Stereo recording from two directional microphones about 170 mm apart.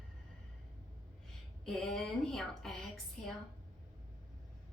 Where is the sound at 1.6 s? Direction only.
Centre (ahead or behind).